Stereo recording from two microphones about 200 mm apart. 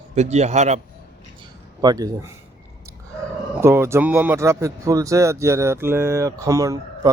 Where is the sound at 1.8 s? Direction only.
20° right (ahead or behind).